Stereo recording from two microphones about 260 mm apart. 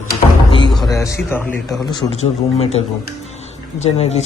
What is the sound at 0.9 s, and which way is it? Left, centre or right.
Speech, centre.